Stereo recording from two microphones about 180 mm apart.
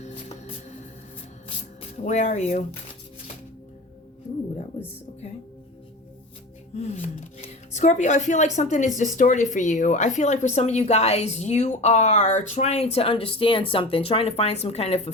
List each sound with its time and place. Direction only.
0.0 s music: 40° left (ahead or behind)
1.8 s speech: 40° left (ahead or behind)
6.7 s speech: 40° left (ahead or behind)